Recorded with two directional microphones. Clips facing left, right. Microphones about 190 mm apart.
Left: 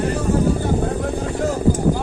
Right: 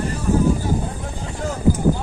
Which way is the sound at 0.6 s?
60° left (ahead or behind).